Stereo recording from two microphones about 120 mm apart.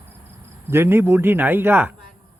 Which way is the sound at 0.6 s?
20° right (ahead or behind).